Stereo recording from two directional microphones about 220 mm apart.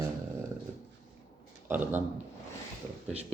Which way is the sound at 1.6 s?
10° right (ahead or behind).